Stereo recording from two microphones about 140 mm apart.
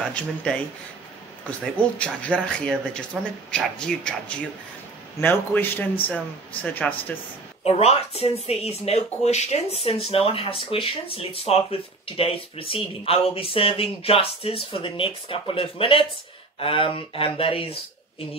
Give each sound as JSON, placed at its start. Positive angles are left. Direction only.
{"t": 0.1, "sound": "speech", "side_deg": 10}
{"t": 1.6, "sound": "speech", "side_deg": 10}
{"t": 7.6, "sound": "speech", "side_deg": 45}